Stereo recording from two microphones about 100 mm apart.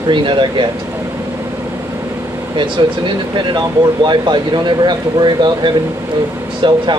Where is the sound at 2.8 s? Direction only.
45° right (ahead or behind).